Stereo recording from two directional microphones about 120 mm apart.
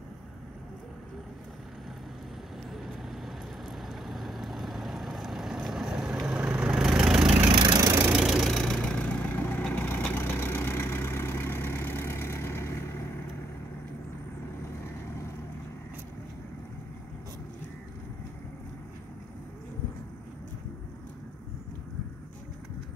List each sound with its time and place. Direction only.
2.7 s vehicle: centre (ahead or behind)
7.5 s vehicle: 35° right (ahead or behind)
7.9 s vehicle: 10° right (ahead or behind); by 13.0 s 20° left (ahead or behind)